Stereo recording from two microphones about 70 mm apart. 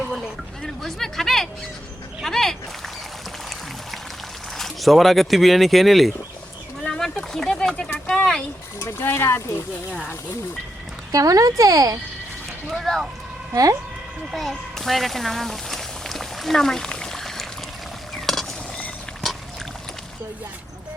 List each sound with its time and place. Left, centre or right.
0.6 s speech: centre
2.2 s a sound: centre
4.5 s speech: centre
6.8 s a sound: centre
8.8 s speech: left
11.1 s speech: right
12.7 s speech: centre
13.5 s speech: right
14.3 s a sound: centre